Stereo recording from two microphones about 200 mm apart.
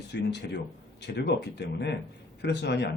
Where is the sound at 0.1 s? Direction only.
60° left (ahead or behind).